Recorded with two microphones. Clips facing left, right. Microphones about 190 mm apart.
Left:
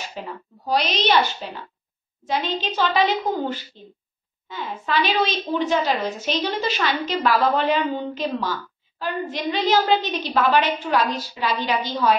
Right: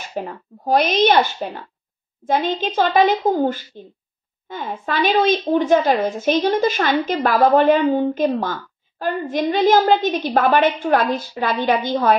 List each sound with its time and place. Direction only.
0.0 s a woman's voice: 50° right (ahead or behind)